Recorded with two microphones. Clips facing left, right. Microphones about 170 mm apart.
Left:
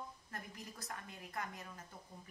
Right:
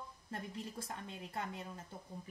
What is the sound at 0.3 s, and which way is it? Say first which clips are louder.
Speech: right 6 dB; 30° right (ahead or behind).